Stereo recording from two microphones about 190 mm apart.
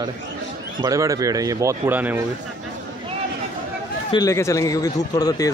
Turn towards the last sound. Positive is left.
turn(degrees=20)  # may be behind; listen again after turning